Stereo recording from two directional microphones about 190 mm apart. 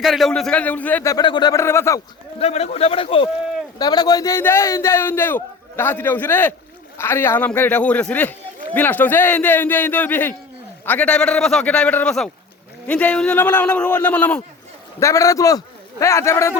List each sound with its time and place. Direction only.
0.0 s a man's voice: centre (ahead or behind)
1.1 s a man's voice: 25° left (ahead or behind)
2.4 s a man's voice: 35° left (ahead or behind); by 16.6 s 15° left (ahead or behind)